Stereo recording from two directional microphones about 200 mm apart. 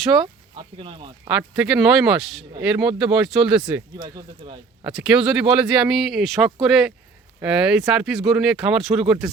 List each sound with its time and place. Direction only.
0.5 s speech: 25° right (ahead or behind)
1.4 s speech: 5° right (ahead or behind)
3.9 s speech: 20° right (ahead or behind)
4.8 s speech: 5° right (ahead or behind)